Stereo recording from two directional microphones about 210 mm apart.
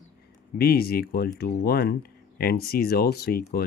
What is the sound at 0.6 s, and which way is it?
Speech, 45° left (ahead or behind).